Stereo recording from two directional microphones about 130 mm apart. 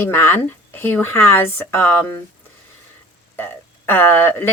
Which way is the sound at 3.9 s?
15° left (ahead or behind).